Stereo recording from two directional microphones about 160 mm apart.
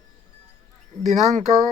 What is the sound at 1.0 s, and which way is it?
Speech, 45° right (ahead or behind).